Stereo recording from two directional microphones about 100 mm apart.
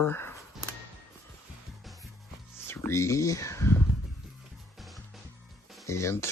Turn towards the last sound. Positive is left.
turn(degrees=30)  # may be behind; listen again after turning